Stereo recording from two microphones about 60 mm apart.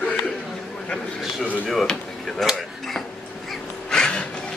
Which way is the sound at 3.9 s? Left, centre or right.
Centre.